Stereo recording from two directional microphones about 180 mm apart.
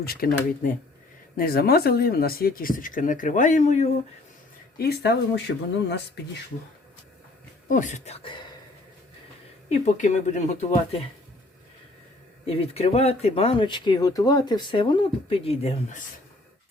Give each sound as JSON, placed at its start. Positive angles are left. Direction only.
{"t": 0.0, "sound": "speech", "side_deg": 55}
{"t": 4.8, "sound": "speech", "side_deg": 65}
{"t": 7.7, "sound": "speech", "side_deg": 45}
{"t": 9.6, "sound": "speech", "side_deg": 40}
{"t": 12.5, "sound": "speech", "side_deg": 35}